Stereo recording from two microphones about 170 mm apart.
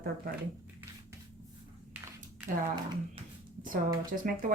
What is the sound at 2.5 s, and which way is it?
Speech, 50° right (ahead or behind).